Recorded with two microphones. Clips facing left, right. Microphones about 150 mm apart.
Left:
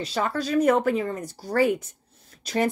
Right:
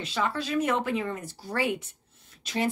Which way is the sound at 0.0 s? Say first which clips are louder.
Left 3 dB; 40° left (ahead or behind).